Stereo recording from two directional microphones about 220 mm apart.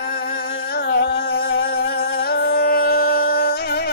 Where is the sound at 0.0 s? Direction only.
45° left (ahead or behind).